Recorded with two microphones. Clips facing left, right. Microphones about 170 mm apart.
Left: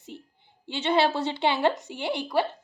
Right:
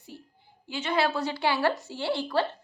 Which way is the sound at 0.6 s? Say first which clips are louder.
Left 3 dB; 25° left (ahead or behind).